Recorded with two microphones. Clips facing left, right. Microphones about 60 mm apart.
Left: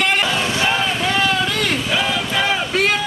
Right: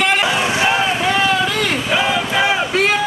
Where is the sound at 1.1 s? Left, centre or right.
Centre.